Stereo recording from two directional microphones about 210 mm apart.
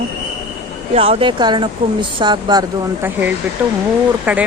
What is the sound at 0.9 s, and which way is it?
Speech, 30° right (ahead or behind).